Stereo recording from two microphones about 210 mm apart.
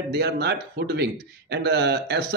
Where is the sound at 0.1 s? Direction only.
50° right (ahead or behind).